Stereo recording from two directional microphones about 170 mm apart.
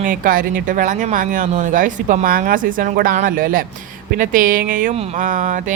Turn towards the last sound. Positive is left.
turn(degrees=-50)  # may be behind; listen again after turning